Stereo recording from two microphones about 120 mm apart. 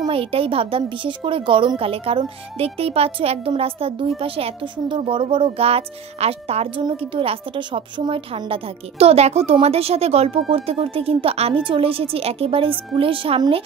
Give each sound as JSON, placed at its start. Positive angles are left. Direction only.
{"t": 0.1, "sound": "a woman's voice", "side_deg": -50}